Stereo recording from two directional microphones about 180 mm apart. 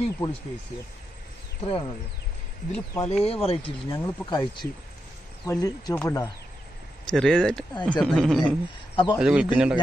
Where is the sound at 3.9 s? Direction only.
20° left (ahead or behind).